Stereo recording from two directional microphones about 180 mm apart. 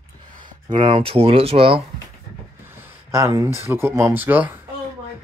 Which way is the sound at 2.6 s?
10° right (ahead or behind).